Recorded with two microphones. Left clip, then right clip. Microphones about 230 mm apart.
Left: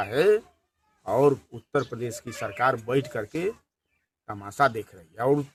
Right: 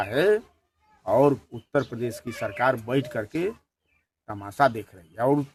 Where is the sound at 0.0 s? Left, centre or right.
Centre.